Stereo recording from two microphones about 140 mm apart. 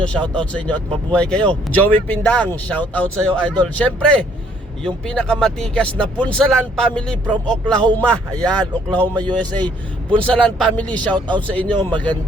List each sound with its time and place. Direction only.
0.0 s speech: 5° left (ahead or behind)
11.8 s a man's voice: 35° right (ahead or behind)